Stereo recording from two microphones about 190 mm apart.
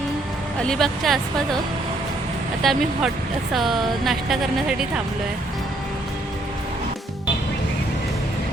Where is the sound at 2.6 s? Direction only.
Centre (ahead or behind).